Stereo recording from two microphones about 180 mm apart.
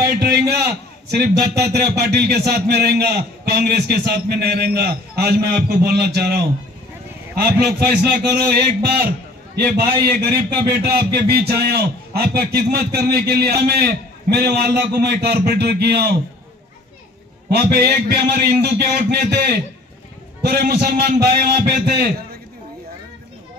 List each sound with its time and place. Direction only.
0.0 s a sound: 60° right (ahead or behind)
1.1 s speech: 60° right (ahead or behind)
10.0 s speech: 65° right (ahead or behind)
17.5 s speech: 65° right (ahead or behind)